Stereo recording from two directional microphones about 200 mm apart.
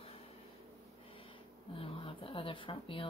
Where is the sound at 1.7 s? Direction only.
25° left (ahead or behind).